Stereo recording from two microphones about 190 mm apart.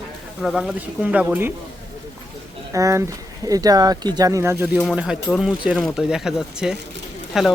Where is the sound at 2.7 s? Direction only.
15° right (ahead or behind).